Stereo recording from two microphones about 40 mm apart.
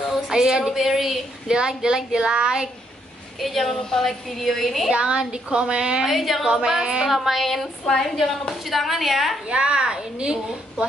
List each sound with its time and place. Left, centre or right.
0.3 s a woman's voice: centre
1.5 s a woman's voice: centre
3.3 s a woman's voice: centre
3.6 s a woman's voice: centre
4.9 s a woman's voice: right
6.0 s a woman's voice: centre
6.4 s a woman's voice: centre
7.1 s a woman's voice: centre
7.8 s a woman's voice: centre
9.5 s a woman's voice: right